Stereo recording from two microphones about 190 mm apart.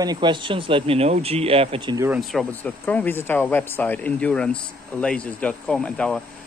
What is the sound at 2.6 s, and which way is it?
Speech, 10° left (ahead or behind).